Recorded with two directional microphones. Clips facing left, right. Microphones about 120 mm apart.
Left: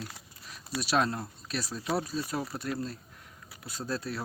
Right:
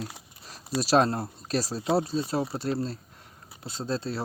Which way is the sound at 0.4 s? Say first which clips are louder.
Right 6 dB; 35° right (ahead or behind).